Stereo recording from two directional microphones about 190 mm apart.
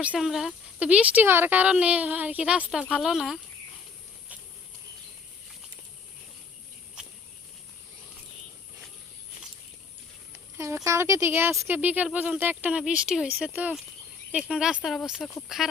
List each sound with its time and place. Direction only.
0.0 s speech: 5° right (ahead or behind)
7.0 s a sound: 5° right (ahead or behind)
10.8 s speech: 15° right (ahead or behind)